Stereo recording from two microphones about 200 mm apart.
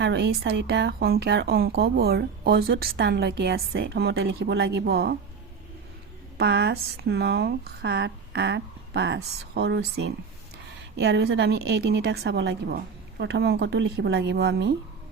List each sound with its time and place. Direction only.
0.0 s speech: 60° right (ahead or behind)
6.3 s a woman's voice: 55° right (ahead or behind)